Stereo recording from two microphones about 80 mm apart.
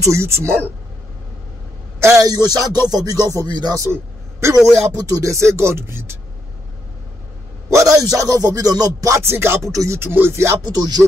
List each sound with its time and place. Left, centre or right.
0.0 s speech: right
2.0 s a sound: right
2.2 s speech: right
3.9 s a sound: right
4.6 s speech: right
7.7 s speech: right
9.2 s speech: right
10.7 s speech: right